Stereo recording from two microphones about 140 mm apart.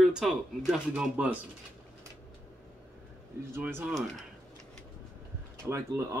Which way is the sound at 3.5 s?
15° right (ahead or behind).